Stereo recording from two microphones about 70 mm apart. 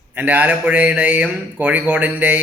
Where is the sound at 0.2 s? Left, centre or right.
Right.